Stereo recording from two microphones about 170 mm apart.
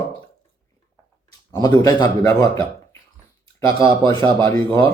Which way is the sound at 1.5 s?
20° left (ahead or behind).